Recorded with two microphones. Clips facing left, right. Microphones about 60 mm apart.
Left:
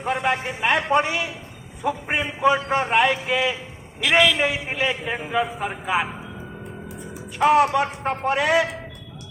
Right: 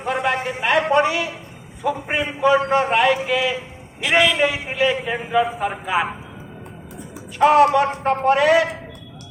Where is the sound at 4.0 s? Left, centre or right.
Right.